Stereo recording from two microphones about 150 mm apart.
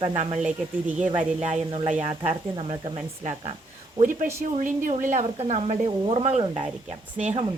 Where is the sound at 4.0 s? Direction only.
60° right (ahead or behind); by 6.6 s 40° right (ahead or behind).